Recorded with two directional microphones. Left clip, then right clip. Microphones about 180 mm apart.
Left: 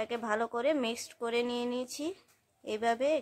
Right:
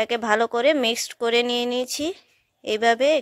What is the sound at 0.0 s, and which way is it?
A woman's voice, 35° right (ahead or behind).